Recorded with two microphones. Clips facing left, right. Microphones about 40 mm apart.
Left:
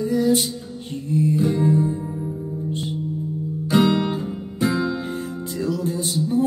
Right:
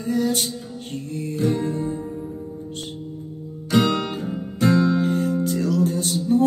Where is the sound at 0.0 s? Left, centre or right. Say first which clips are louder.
Left 3 dB; right.